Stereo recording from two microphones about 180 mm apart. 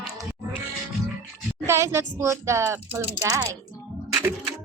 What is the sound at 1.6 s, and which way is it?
Speech, 15° right (ahead or behind).